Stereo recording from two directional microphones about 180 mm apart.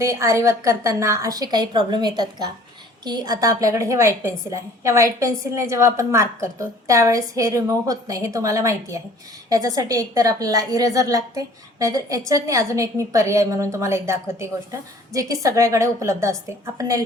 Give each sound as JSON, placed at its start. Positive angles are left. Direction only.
{"t": 0.0, "sound": "a woman's voice", "side_deg": -15}